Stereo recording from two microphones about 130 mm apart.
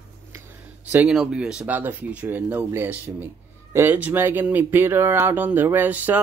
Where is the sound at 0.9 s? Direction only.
5° right (ahead or behind).